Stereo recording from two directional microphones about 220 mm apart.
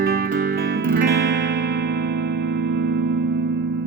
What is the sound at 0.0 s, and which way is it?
Music, 45° right (ahead or behind).